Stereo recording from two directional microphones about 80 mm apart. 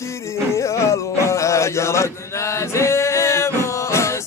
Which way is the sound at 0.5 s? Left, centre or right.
Left.